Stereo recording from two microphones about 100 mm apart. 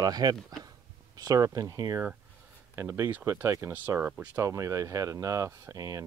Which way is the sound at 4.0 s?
15° right (ahead or behind).